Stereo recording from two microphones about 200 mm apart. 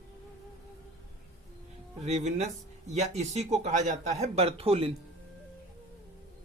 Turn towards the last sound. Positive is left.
turn(degrees=-30)  # may be behind; listen again after turning